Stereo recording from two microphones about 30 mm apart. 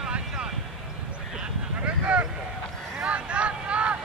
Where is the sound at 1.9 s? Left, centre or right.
Right.